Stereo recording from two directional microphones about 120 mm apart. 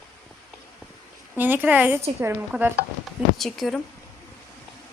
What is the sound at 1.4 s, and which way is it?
Speech, 15° right (ahead or behind).